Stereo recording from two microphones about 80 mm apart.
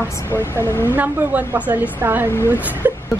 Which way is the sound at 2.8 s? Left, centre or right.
Right.